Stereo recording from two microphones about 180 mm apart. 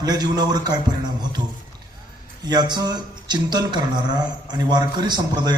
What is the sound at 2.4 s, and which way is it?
Speech, 25° right (ahead or behind).